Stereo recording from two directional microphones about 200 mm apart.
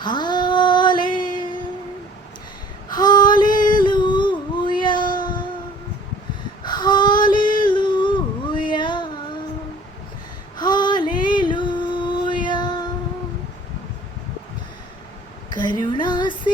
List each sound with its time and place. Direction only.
0.0 s music: 20° left (ahead or behind)
2.9 s female singing: 20° left (ahead or behind)
3.8 s music: 25° left (ahead or behind)
6.6 s female singing: 20° left (ahead or behind)
7.6 s a sound: 25° left (ahead or behind)
10.6 s female singing: 20° left (ahead or behind)
15.6 s music: 20° left (ahead or behind)